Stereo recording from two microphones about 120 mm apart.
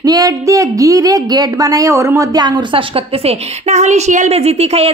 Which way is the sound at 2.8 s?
55° right (ahead or behind).